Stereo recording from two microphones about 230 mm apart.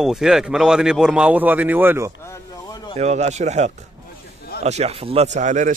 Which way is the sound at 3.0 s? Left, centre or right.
Right.